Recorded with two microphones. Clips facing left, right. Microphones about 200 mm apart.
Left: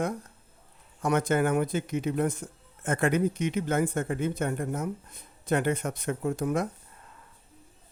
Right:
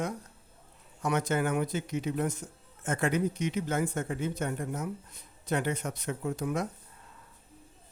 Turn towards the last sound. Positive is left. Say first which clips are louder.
# left 4 dB
turn(degrees=50)  # may be behind; listen again after turning